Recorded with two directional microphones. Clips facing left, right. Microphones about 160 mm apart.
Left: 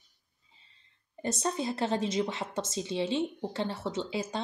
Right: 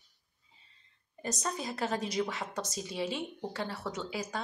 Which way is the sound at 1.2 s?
30° left (ahead or behind).